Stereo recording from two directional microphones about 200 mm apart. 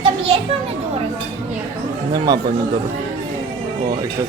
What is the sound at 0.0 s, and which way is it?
Children playing, 30° right (ahead or behind).